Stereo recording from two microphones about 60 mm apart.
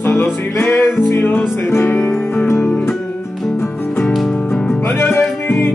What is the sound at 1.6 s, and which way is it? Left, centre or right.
Music, left.